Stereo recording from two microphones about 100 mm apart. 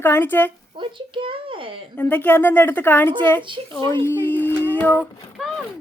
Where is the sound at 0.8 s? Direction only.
55° right (ahead or behind).